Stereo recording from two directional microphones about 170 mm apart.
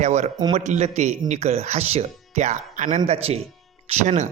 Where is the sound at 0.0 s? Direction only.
45° right (ahead or behind).